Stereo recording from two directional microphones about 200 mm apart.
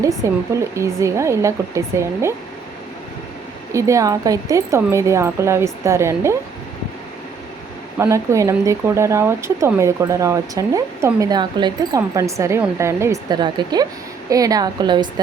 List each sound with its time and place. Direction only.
0.2 s speech: 15° right (ahead or behind)
3.7 s speech: 15° right (ahead or behind)
7.9 s a woman's voice: 15° right (ahead or behind)